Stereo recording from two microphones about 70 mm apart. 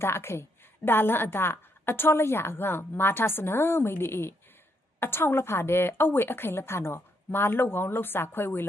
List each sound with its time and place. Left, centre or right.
0.0 s a woman's voice: left